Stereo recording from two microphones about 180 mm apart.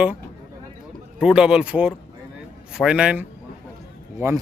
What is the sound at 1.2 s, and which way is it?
Speech, 5° right (ahead or behind).